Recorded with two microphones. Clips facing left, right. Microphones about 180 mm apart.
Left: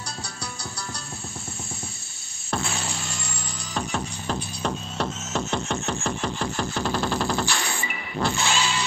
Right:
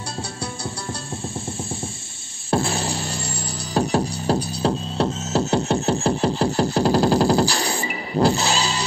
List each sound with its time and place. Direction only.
2.5 s music: 35° right (ahead or behind)